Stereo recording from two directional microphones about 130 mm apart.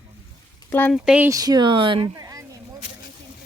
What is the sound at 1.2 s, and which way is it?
Speech, 30° right (ahead or behind).